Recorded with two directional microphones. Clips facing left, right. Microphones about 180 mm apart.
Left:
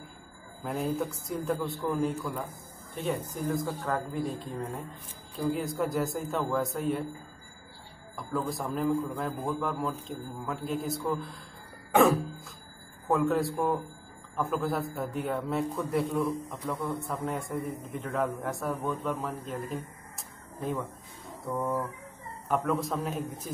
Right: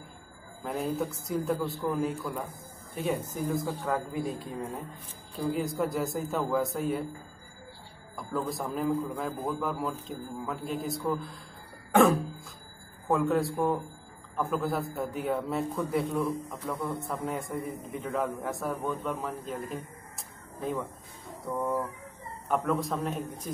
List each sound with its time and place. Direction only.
0.7 s a man's voice: centre (ahead or behind)
8.2 s a man's voice: centre (ahead or behind)
11.9 s cough: centre (ahead or behind)
13.0 s a man's voice: centre (ahead or behind)
19.4 s a sound: centre (ahead or behind)
21.5 s a man's voice: centre (ahead or behind)